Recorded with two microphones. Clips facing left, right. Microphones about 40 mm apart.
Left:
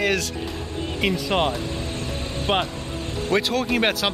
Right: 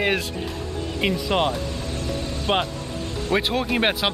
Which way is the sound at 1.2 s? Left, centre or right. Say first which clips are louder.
Right 1 dB; left.